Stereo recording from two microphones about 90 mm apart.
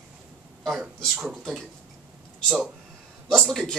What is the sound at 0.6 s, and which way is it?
A man's voice, 5° right (ahead or behind).